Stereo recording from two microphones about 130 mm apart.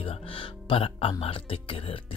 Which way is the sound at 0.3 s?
40° left (ahead or behind).